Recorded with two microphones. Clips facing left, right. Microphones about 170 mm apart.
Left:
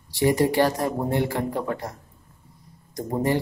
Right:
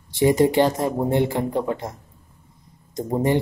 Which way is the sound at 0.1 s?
20° right (ahead or behind).